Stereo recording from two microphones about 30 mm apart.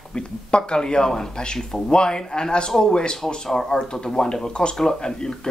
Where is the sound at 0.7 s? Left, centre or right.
Left.